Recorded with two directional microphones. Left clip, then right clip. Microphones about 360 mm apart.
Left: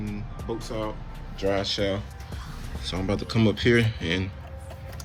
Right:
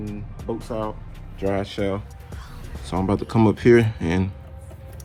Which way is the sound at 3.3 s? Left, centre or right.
Centre.